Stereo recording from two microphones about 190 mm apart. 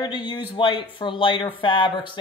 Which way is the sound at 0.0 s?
25° left (ahead or behind).